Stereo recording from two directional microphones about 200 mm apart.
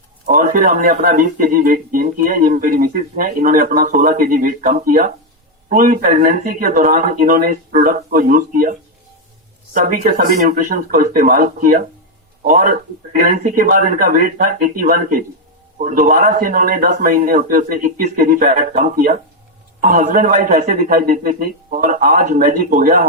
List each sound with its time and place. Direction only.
0.3 s speech: 45° right (ahead or behind)
9.7 s a man's voice: 45° right (ahead or behind)